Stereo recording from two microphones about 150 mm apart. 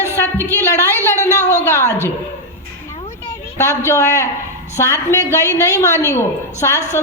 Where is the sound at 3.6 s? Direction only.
20° left (ahead or behind).